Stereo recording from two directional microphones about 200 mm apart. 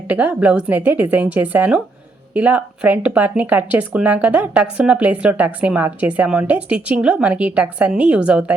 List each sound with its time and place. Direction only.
0.1 s speech: 10° right (ahead or behind)